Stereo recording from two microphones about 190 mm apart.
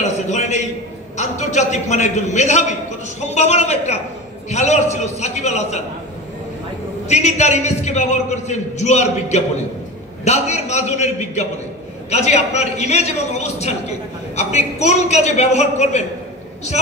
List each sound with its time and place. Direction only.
0.0 s a sound: 35° left (ahead or behind)
1.1 s a man's voice: 35° left (ahead or behind)
7.1 s a man's voice: 35° left (ahead or behind)